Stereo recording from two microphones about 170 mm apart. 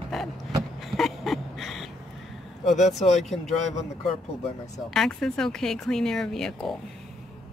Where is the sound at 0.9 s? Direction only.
Centre (ahead or behind).